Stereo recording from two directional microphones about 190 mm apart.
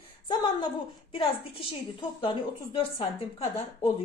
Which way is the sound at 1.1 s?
25° left (ahead or behind).